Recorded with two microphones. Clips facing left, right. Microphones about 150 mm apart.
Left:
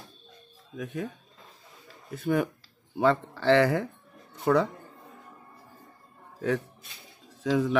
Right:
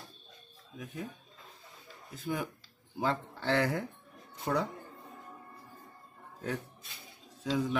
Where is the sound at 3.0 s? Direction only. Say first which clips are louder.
Left 9 dB; 80° left.